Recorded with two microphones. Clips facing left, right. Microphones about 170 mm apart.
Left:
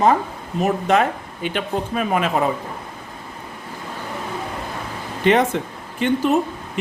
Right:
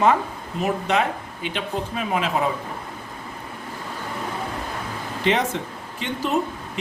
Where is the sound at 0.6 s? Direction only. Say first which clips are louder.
Left 4 dB; 50° left (ahead or behind).